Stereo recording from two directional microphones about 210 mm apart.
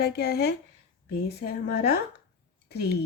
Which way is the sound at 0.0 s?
50° left (ahead or behind).